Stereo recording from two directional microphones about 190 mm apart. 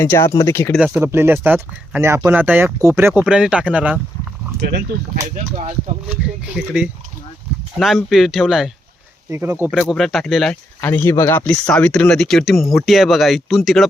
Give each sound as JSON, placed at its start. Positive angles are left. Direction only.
{"t": 0.0, "sound": "speech", "side_deg": 10}
{"t": 0.8, "sound": "speech", "side_deg": -15}
{"t": 5.2, "sound": "speech", "side_deg": -35}
{"t": 6.1, "sound": "speech", "side_deg": -5}
{"t": 9.3, "sound": "speech", "side_deg": -15}
{"t": 9.7, "sound": "speech", "side_deg": 5}